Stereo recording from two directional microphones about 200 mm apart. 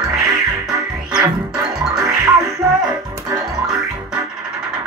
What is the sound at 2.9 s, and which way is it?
Music, 15° right (ahead or behind).